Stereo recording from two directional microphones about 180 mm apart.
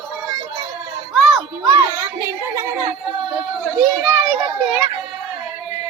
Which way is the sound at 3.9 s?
10° right (ahead or behind).